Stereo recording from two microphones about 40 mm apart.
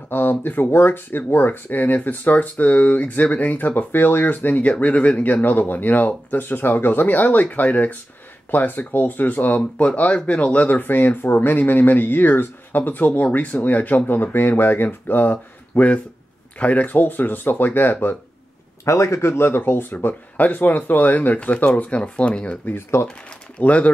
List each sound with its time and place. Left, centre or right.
0.1 s speech: left
3.9 s speech: left
9.8 s speech: left
19.2 s speech: left
20.3 s speech: left
21.4 s speech: left
22.8 s speech: left
23.6 s speech: left